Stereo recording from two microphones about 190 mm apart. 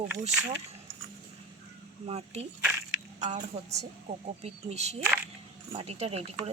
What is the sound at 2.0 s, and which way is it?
A woman's voice, 35° right (ahead or behind).